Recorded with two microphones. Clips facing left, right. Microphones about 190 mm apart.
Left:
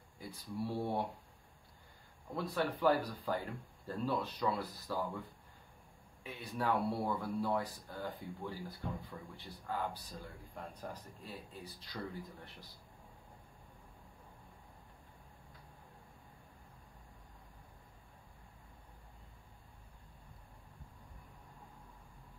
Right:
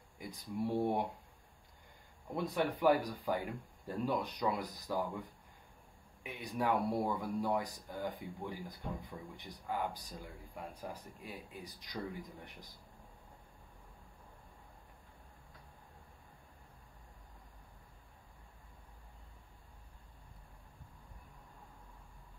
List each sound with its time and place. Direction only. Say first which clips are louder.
0.2 s speech: right 2 dB; 15° right (ahead or behind)
2.3 s speech: right 2 dB; 15° right (ahead or behind)